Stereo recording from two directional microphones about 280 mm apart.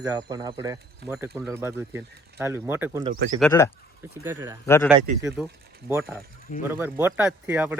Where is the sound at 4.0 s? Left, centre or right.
Centre.